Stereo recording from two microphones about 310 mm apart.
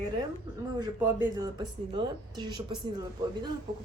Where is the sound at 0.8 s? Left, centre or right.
Centre.